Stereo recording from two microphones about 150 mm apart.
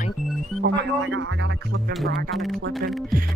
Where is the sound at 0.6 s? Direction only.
90° right.